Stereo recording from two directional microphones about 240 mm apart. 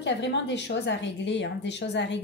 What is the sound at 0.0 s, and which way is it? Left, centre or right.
A woman's voice, left.